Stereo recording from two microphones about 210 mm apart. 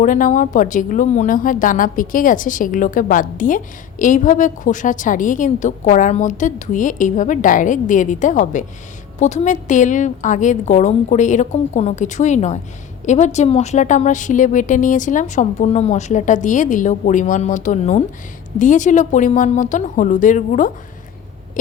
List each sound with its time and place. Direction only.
0.0 s speech: 40° left (ahead or behind)